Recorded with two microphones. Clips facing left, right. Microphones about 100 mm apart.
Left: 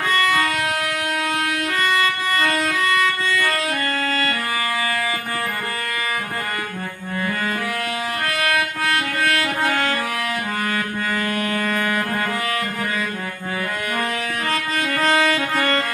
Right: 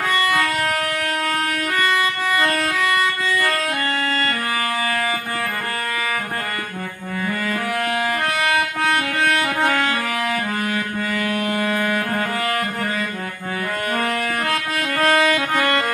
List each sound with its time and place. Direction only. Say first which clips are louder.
2.0 s music: right 1 dB; 10° right (ahead or behind)
8.3 s music: right 1 dB; 20° right (ahead or behind)
14.4 s music: even; 10° right (ahead or behind)